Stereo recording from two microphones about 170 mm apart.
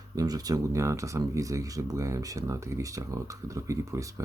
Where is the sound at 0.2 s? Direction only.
20° right (ahead or behind).